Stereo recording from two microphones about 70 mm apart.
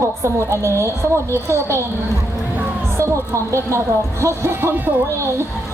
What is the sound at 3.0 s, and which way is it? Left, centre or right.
A man's voice, right.